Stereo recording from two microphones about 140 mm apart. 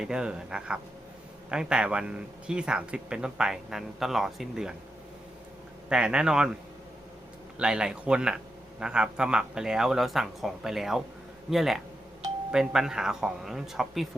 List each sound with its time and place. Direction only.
0.0 s speech: 5° right (ahead or behind)
5.9 s speech: 5° right (ahead or behind)
7.6 s speech: 5° right (ahead or behind)